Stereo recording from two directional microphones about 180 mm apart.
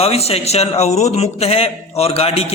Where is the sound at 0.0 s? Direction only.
35° left (ahead or behind).